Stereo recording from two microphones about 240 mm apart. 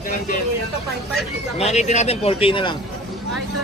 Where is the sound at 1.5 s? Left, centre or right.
Left.